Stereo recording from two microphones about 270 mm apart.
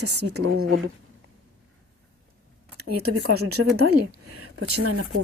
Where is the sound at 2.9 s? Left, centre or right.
Right.